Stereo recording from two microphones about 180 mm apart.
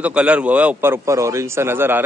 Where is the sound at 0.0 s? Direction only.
5° right (ahead or behind).